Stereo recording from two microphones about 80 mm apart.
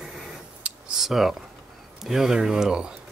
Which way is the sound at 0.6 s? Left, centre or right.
Centre.